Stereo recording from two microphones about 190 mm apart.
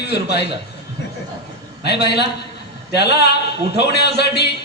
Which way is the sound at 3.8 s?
60° left (ahead or behind).